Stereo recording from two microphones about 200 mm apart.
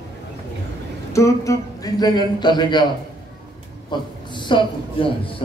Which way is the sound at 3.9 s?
25° left (ahead or behind).